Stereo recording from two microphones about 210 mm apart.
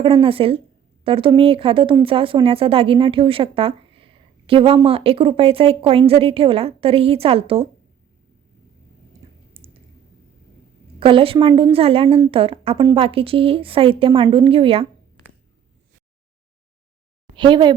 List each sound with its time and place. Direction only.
0.0 s speech: 25° right (ahead or behind)
9.6 s a sound: 25° right (ahead or behind)
11.0 s speech: 25° right (ahead or behind)
17.3 s speech: 20° right (ahead or behind)